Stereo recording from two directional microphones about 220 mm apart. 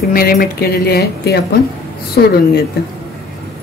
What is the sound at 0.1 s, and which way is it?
Speech, 45° left (ahead or behind).